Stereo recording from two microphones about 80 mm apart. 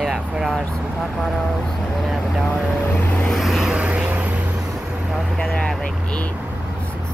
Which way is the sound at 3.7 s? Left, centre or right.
Centre.